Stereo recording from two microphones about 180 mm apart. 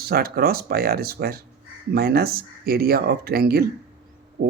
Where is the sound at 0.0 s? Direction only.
55° right (ahead or behind).